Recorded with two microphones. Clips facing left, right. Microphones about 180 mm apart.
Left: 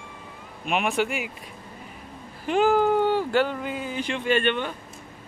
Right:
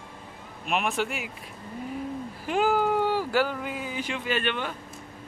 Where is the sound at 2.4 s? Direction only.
Centre (ahead or behind).